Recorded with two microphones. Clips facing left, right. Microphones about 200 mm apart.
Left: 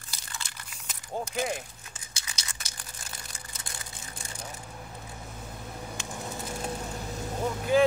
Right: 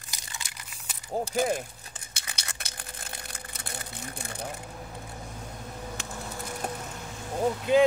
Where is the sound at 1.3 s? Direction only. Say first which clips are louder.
Right 6 dB; 55° right (ahead or behind).